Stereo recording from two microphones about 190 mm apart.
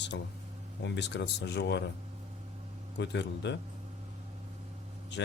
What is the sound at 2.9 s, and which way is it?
Speech, 65° left (ahead or behind).